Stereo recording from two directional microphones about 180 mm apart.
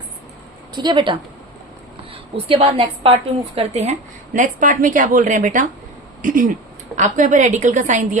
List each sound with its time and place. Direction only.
0.8 s a woman's voice: 25° right (ahead or behind)
2.5 s a woman's voice: 30° right (ahead or behind)